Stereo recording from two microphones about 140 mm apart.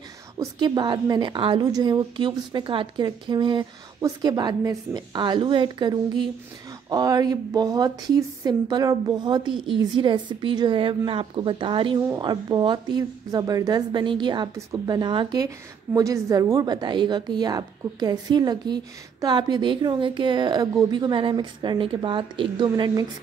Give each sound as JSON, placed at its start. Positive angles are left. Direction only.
{"t": 0.4, "sound": "a woman's voice", "side_deg": -30}